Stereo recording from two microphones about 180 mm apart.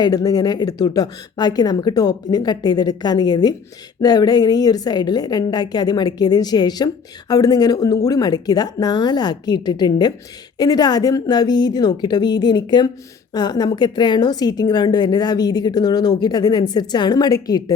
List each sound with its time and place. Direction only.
0.0 s a woman's voice: 20° left (ahead or behind)